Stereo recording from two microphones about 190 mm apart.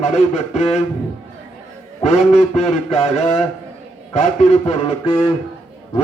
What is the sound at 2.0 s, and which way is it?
A man's voice, 35° left (ahead or behind).